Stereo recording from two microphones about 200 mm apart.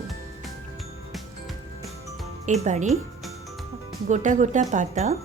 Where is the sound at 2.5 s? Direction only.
35° right (ahead or behind).